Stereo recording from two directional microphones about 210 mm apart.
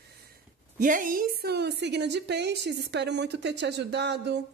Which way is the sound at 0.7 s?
40° right (ahead or behind).